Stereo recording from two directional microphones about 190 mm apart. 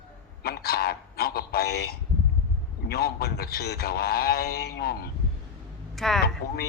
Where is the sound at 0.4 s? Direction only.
55° left (ahead or behind).